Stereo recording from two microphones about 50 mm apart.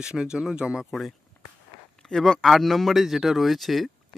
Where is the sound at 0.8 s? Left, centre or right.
Centre.